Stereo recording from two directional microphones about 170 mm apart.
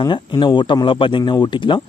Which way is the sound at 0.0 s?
25° left (ahead or behind).